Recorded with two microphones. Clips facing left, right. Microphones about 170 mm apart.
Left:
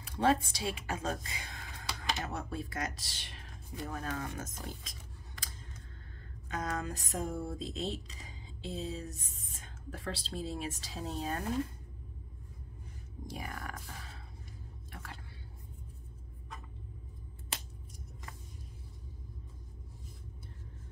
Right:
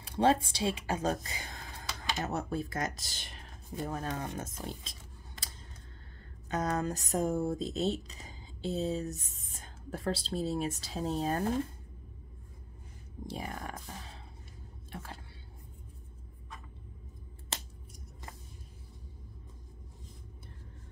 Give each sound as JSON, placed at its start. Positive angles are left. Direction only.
{"t": 0.0, "sound": "speech", "side_deg": -30}
{"t": 6.5, "sound": "speech", "side_deg": -40}
{"t": 13.3, "sound": "speech", "side_deg": -25}